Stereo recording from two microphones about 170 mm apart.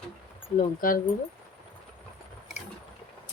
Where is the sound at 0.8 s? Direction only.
55° left (ahead or behind).